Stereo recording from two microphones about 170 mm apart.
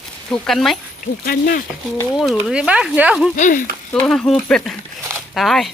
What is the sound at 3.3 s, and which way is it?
Speech, 50° left (ahead or behind).